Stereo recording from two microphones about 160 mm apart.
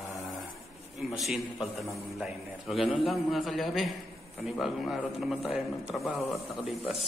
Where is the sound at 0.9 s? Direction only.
Centre (ahead or behind).